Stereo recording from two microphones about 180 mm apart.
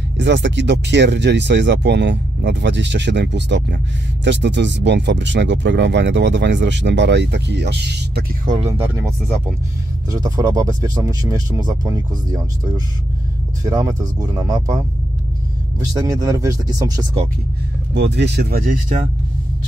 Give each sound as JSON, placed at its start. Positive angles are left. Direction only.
{"t": 0.2, "sound": "speech", "side_deg": -75}
{"t": 10.1, "sound": "speech", "side_deg": -20}
{"t": 16.1, "sound": "speech", "side_deg": -20}
{"t": 17.9, "sound": "speech", "side_deg": -70}